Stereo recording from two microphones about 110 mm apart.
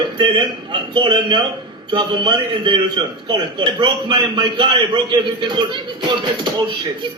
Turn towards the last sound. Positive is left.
turn(degrees=-45)  # may be behind; listen again after turning